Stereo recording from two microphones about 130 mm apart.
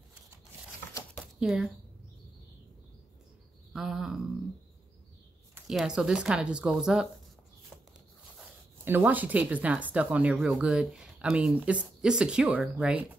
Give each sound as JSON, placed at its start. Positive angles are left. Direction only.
{"t": 1.2, "sound": "a sound", "side_deg": -5}
{"t": 3.7, "sound": "speech", "side_deg": -5}
{"t": 5.7, "sound": "speech", "side_deg": -5}
{"t": 8.8, "sound": "speech", "side_deg": -15}